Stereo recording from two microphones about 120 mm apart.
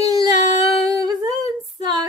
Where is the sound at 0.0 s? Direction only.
35° right (ahead or behind).